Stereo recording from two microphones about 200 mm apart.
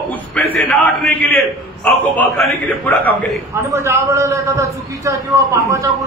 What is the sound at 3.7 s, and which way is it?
A man's voice, 15° right (ahead or behind).